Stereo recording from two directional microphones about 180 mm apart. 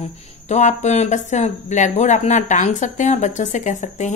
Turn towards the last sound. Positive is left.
turn(degrees=40)  # may be behind; listen again after turning